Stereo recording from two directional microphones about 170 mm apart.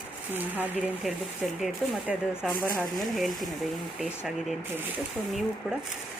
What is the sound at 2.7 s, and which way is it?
Speech, 15° left (ahead or behind).